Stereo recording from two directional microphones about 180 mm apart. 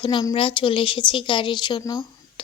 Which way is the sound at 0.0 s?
25° left (ahead or behind).